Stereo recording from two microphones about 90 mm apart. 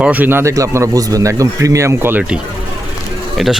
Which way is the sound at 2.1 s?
15° right (ahead or behind).